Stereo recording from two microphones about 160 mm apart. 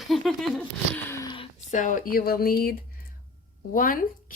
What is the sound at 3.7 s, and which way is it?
Speech, 60° left (ahead or behind).